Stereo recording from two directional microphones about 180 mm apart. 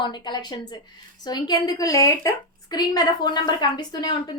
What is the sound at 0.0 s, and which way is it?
A woman's voice, 25° left (ahead or behind).